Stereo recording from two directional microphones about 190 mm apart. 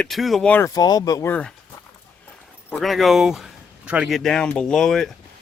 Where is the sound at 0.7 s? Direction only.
20° left (ahead or behind).